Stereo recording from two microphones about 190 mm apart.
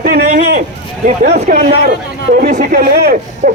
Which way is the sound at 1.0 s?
45° right (ahead or behind).